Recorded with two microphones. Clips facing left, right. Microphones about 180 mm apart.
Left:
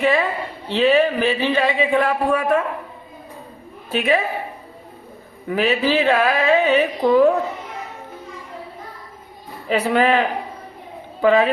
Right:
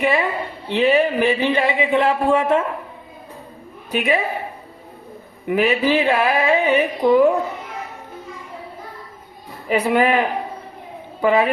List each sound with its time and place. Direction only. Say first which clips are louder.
0.0 s speech: left 1 dB; 15° right (ahead or behind)
3.9 s speech: left 1 dB; 15° right (ahead or behind)
5.5 s speech: right 1 dB; 15° right (ahead or behind)
9.6 s speech: even; 10° right (ahead or behind)